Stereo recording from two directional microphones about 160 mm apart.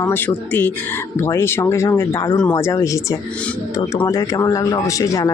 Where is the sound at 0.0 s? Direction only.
10° left (ahead or behind).